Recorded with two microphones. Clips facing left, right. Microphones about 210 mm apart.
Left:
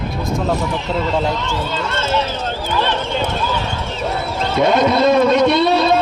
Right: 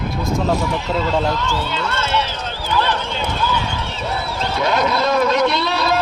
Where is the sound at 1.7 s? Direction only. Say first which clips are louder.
Left 2 dB; 45° left (ahead or behind).